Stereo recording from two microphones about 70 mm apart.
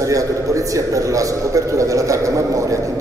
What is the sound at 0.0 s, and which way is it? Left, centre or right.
A man's voice, right.